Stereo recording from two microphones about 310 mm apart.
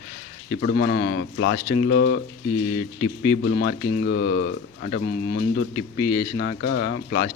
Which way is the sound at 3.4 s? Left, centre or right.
Left.